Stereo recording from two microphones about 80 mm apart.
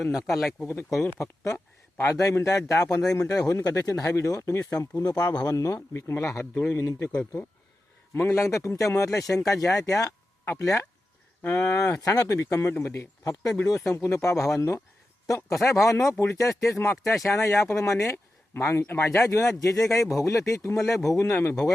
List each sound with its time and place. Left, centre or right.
0.0 s speech: centre
1.0 s speech: left
6.4 s speech: left
17.1 s speech: centre
17.3 s speech: left
19.5 s speech: left
19.8 s speech: centre
20.1 s speech: left